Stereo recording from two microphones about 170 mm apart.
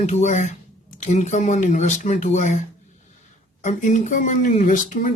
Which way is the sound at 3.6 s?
45° left (ahead or behind).